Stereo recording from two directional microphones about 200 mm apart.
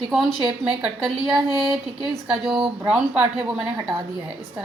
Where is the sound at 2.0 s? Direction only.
Centre (ahead or behind).